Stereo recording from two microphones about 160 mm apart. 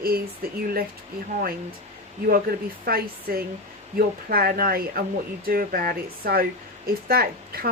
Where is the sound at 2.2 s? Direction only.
65° right (ahead or behind).